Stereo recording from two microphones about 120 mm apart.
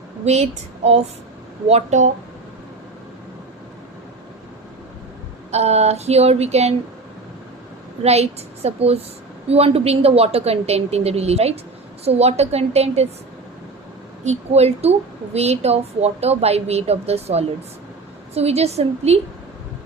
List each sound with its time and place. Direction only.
0.3 s a woman's voice: 65° right (ahead or behind)
1.6 s speech: 70° right (ahead or behind)
5.5 s a woman's voice: 60° right (ahead or behind)
8.0 s a woman's voice: 60° right (ahead or behind)
14.3 s a woman's voice: 60° right (ahead or behind)